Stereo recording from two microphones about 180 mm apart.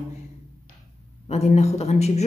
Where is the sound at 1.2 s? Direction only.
35° left (ahead or behind).